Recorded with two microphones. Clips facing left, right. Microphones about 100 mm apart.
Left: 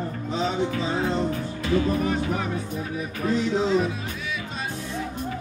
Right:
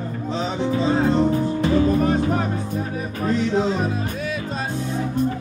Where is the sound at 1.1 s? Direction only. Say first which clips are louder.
Right 8 dB; 40° right (ahead or behind).